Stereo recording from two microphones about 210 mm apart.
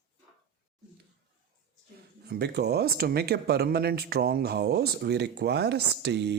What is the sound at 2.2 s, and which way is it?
Speech, 50° right (ahead or behind).